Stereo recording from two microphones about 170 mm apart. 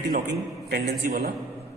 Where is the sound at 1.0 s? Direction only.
60° right (ahead or behind).